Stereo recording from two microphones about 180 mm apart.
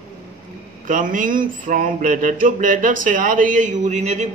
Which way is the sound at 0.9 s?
45° right (ahead or behind).